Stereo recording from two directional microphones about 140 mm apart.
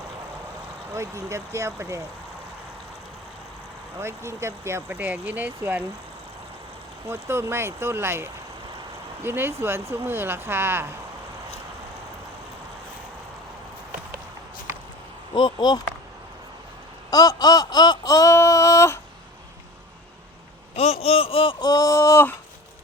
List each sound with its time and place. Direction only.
0.9 s speech: 20° right (ahead or behind)
4.0 s speech: 20° right (ahead or behind)
7.1 s speech: 15° right (ahead or behind)
15.4 s speech: 35° left (ahead or behind)
17.1 s a sound: 25° left (ahead or behind)
20.7 s speech: 45° left (ahead or behind); by 22.4 s 20° left (ahead or behind)